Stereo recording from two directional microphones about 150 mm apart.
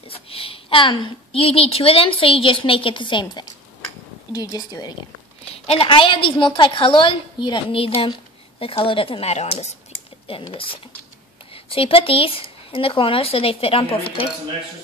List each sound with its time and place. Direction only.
0.1 s a woman's voice: 40° left (ahead or behind)
5.5 s speech: 40° left (ahead or behind)